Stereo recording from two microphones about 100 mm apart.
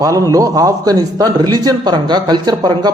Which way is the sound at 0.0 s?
35° right (ahead or behind).